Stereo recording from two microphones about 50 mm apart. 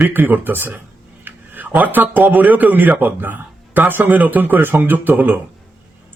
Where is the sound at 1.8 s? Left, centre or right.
Right.